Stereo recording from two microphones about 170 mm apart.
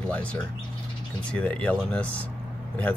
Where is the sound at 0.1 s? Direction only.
5° left (ahead or behind).